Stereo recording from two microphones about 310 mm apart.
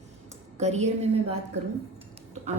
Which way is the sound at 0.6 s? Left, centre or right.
Right.